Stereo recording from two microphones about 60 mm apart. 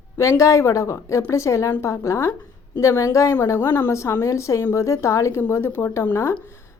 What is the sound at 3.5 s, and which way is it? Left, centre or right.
Speech, left.